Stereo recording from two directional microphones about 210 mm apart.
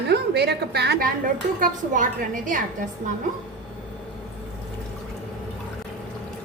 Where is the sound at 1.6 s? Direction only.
40° right (ahead or behind).